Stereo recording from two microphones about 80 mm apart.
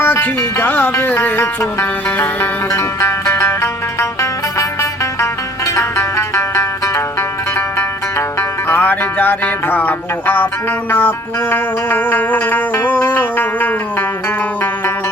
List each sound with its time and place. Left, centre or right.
0.0 s music: left
3.0 s music: left
8.8 s music: left